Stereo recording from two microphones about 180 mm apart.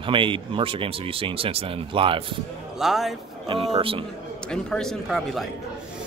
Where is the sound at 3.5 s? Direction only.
30° right (ahead or behind).